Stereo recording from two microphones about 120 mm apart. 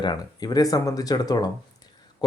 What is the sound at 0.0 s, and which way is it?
Speech, 35° left (ahead or behind).